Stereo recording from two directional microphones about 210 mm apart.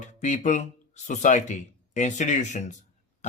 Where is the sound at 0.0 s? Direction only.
35° left (ahead or behind).